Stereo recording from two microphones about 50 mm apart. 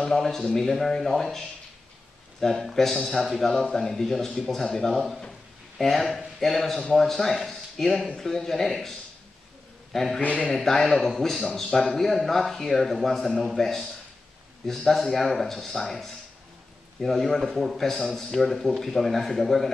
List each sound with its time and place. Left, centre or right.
0.0 s a man's voice: centre
2.4 s a man's voice: centre
9.9 s a man's voice: centre
10.2 s a man's voice: left
10.5 s a man's voice: centre